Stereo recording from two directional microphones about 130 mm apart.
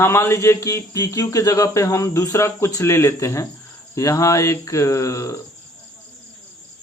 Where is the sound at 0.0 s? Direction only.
20° left (ahead or behind).